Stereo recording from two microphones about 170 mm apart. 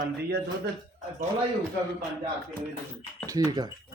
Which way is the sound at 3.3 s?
20° right (ahead or behind).